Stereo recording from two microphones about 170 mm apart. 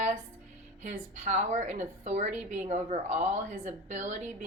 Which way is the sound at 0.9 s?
45° right (ahead or behind).